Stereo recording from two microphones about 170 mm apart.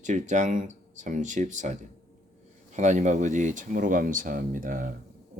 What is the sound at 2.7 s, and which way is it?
Speech, 45° right (ahead or behind).